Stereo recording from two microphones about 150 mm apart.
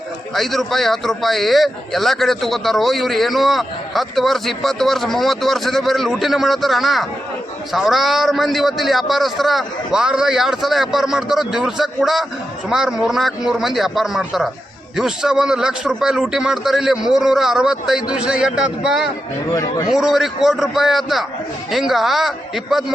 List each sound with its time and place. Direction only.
0.3 s a man's voice: centre (ahead or behind)
19.5 s a man's voice: 25° left (ahead or behind)
19.9 s a man's voice: 5° right (ahead or behind)